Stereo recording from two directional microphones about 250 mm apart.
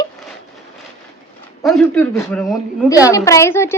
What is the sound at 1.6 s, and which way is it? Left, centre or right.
A woman's voice, centre.